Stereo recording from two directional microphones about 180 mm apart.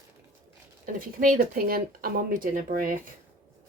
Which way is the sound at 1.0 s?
50° right (ahead or behind).